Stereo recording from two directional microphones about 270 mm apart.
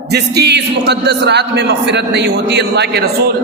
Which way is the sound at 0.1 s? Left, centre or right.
Right.